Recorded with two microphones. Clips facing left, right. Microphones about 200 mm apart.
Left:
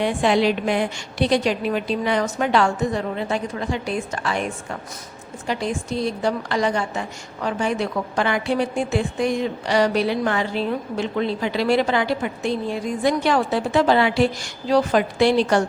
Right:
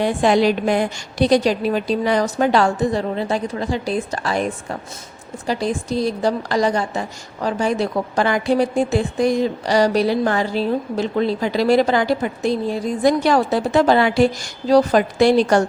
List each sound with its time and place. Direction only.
0.0 s a woman's voice: 40° right (ahead or behind)